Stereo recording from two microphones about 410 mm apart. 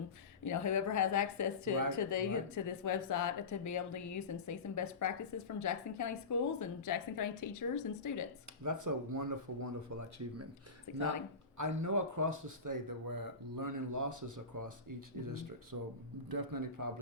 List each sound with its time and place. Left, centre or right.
0.4 s speech: left
8.6 s speech: right
10.9 s speech: left
11.5 s speech: right